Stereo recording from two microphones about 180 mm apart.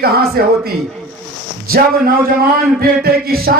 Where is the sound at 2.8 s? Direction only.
55° right (ahead or behind).